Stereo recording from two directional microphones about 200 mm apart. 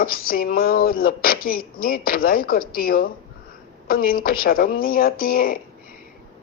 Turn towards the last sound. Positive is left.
turn(degrees=45)  # may be behind; listen again after turning